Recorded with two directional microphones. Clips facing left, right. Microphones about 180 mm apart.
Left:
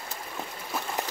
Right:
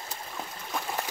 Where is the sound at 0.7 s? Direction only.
5° left (ahead or behind).